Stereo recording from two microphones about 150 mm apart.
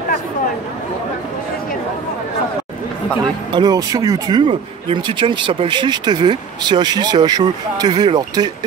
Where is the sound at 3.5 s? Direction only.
25° right (ahead or behind).